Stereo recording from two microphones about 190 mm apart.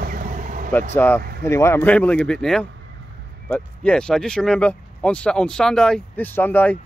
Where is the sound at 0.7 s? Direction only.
10° left (ahead or behind).